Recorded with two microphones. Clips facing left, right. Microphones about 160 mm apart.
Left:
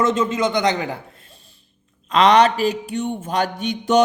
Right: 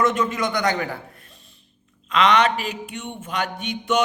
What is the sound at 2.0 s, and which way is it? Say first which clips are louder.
A man's voice: left 4 dB; 35° left (ahead or behind).